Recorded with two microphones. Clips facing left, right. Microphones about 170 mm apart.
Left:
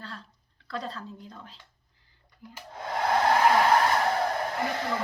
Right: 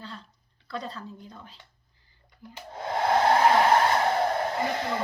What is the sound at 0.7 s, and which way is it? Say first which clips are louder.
Speech: even; centre (ahead or behind).